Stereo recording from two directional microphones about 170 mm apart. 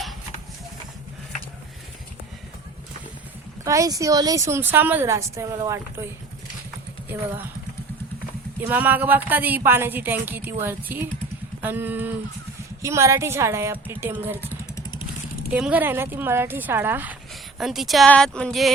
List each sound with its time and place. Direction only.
3.6 s a woman's voice: 20° right (ahead or behind)
8.6 s a woman's voice: 10° right (ahead or behind)
15.5 s a woman's voice: 10° right (ahead or behind)